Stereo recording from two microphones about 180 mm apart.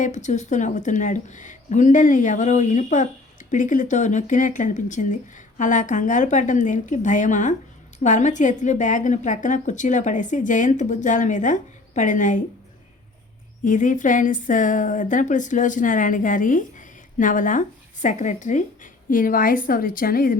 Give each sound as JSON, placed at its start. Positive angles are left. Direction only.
{"t": 0.0, "sound": "a woman's voice", "side_deg": 40}
{"t": 13.7, "sound": "a woman's voice", "side_deg": 45}